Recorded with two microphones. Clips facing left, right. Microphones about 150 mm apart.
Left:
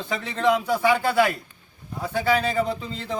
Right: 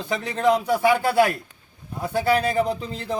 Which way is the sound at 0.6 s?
10° right (ahead or behind).